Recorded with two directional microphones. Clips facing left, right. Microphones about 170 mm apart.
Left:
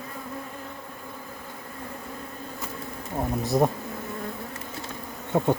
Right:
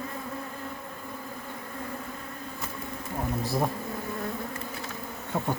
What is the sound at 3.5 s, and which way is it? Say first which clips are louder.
Bee: left 7 dB; 20° left (ahead or behind).